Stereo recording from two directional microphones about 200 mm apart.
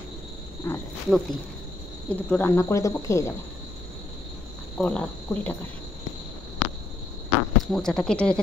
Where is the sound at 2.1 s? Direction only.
10° left (ahead or behind).